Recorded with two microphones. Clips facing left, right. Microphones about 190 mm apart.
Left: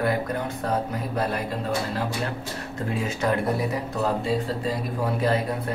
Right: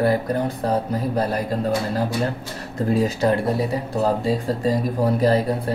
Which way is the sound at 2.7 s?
35° right (ahead or behind).